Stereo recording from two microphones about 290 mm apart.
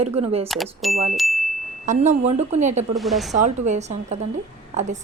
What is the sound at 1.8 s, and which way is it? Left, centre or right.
A woman's voice, right.